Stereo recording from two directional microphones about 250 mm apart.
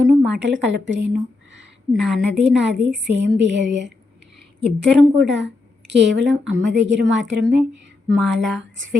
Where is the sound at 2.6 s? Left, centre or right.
Right.